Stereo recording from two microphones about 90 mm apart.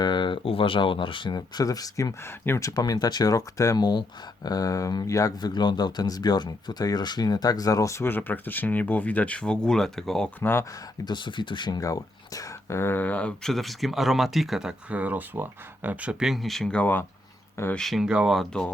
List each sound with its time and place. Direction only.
0.0 s speech: 55° left (ahead or behind)
2.2 s speech: 25° left (ahead or behind)
2.6 s speech: 45° left (ahead or behind)
5.4 s speech: 50° left (ahead or behind); by 10.3 s 5° left (ahead or behind)
10.4 s speech: 25° left (ahead or behind)
11.0 s speech: 60° left (ahead or behind)
11.8 s speech: 40° left (ahead or behind); by 16.1 s 15° right (ahead or behind)
16.2 s speech: centre (ahead or behind); by 17.1 s 20° left (ahead or behind)
17.7 s speech: centre (ahead or behind)
18.3 s speech: 5° left (ahead or behind)